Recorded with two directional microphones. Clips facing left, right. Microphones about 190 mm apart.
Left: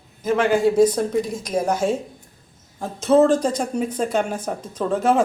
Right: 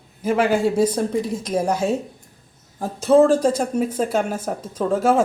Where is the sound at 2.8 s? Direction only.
35° right (ahead or behind).